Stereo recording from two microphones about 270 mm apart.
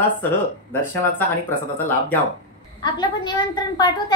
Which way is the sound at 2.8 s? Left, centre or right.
Centre.